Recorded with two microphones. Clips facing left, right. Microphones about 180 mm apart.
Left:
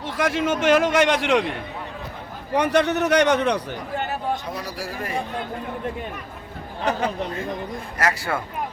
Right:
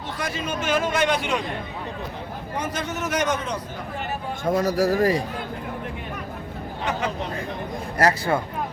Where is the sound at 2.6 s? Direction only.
70° left (ahead or behind).